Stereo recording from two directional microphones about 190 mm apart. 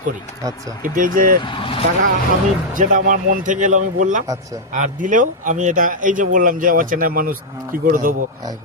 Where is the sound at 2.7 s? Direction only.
45° right (ahead or behind).